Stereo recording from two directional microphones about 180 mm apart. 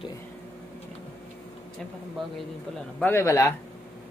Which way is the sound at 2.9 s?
10° left (ahead or behind).